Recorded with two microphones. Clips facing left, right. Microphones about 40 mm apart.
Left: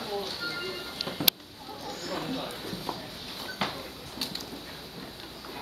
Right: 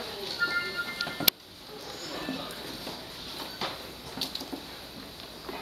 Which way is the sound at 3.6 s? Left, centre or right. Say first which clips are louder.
Left 3 dB; left.